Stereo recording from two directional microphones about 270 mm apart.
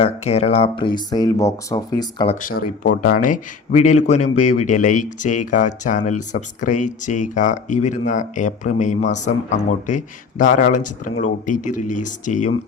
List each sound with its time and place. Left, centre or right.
0.0 s speech: left